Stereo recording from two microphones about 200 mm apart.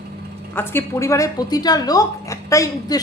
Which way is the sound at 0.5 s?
15° left (ahead or behind).